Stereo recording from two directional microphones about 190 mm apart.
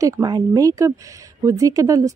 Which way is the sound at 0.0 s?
20° right (ahead or behind).